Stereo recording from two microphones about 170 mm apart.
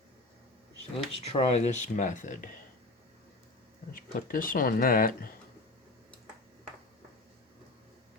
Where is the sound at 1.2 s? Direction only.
35° left (ahead or behind).